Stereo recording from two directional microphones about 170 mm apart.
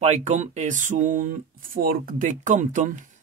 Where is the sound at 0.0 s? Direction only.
40° right (ahead or behind).